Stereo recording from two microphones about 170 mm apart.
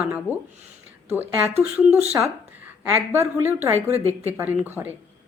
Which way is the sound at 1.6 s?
10° right (ahead or behind).